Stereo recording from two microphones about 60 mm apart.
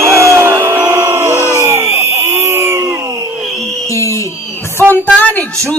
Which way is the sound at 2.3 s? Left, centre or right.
Right.